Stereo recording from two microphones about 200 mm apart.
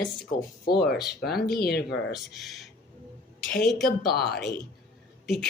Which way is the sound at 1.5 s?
50° left (ahead or behind).